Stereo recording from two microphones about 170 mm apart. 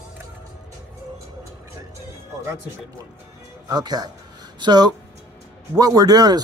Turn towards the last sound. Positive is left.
turn(degrees=-25)  # may be behind; listen again after turning